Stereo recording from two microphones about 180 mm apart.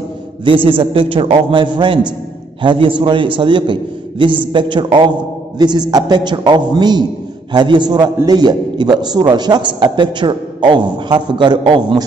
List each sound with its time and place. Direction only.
0.7 s a man's voice: 30° right (ahead or behind)